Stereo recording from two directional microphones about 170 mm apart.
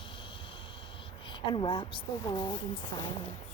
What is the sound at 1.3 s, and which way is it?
Speech, 30° left (ahead or behind).